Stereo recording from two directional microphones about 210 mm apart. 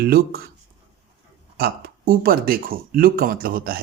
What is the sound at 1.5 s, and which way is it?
Speech, 45° right (ahead or behind).